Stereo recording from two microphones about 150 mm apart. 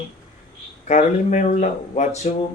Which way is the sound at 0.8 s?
55° left (ahead or behind).